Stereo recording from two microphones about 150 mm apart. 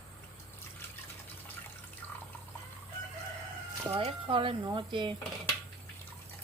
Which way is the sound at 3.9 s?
40° right (ahead or behind).